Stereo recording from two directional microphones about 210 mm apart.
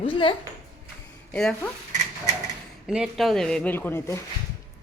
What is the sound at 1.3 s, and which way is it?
Speech, 5° left (ahead or behind).